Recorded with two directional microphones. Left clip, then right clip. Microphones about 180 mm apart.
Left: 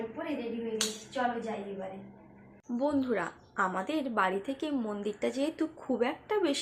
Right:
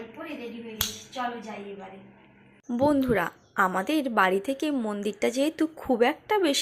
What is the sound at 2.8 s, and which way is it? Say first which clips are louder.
A woman's voice: right 7 dB; 45° right (ahead or behind).